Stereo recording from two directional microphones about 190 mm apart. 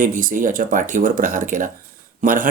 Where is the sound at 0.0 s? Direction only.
45° right (ahead or behind).